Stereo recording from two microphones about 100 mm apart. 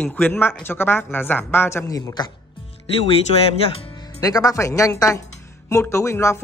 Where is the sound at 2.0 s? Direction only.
45° left (ahead or behind).